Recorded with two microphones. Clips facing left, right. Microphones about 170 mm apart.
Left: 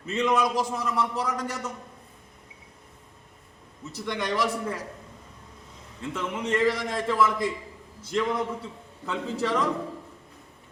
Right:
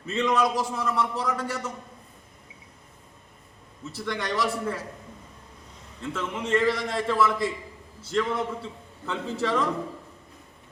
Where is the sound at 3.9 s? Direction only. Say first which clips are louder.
Left 1 dB; 15° left (ahead or behind).